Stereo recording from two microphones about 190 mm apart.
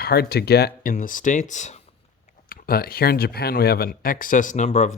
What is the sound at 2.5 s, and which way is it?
Speech, 50° left (ahead or behind).